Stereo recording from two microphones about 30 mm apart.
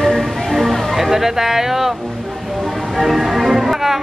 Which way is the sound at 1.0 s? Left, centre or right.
Centre.